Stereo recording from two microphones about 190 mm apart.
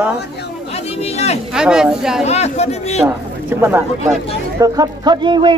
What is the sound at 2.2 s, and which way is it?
Speech, 35° left (ahead or behind).